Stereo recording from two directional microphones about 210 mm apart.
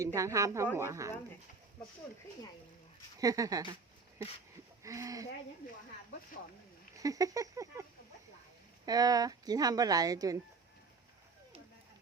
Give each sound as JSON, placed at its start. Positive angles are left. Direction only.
{"t": 0.0, "sound": "speech", "side_deg": -15}
{"t": 3.2, "sound": "speech", "side_deg": -15}
{"t": 4.8, "sound": "speech", "side_deg": -15}
{"t": 6.9, "sound": "speech", "side_deg": -15}
{"t": 8.9, "sound": "speech", "side_deg": -15}